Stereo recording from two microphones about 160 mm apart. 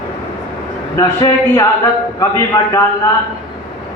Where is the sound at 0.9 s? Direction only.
20° left (ahead or behind).